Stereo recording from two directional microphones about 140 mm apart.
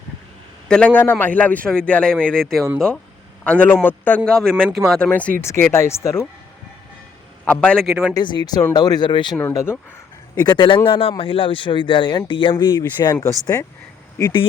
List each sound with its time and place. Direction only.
0.7 s speech: 10° left (ahead or behind)
7.4 s a man's voice: 10° left (ahead or behind)
7.9 s speech: 5° right (ahead or behind)
8.1 s speech: 30° left (ahead or behind)
9.4 s speech: 20° left (ahead or behind)
10.4 s speech: 30° left (ahead or behind)
13.5 s speech: 15° left (ahead or behind)